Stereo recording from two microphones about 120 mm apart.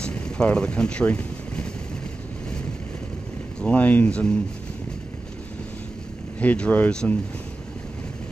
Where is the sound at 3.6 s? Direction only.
10° left (ahead or behind).